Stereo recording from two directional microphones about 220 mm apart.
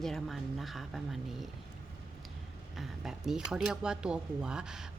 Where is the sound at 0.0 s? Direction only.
Centre (ahead or behind).